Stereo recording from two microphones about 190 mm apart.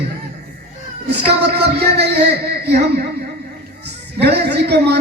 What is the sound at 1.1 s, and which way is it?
A man's voice, 60° right (ahead or behind).